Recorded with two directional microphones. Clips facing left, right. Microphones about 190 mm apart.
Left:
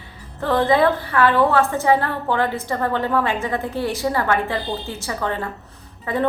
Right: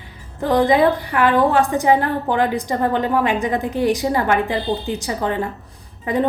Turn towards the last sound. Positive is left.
turn(degrees=-15)  # may be behind; listen again after turning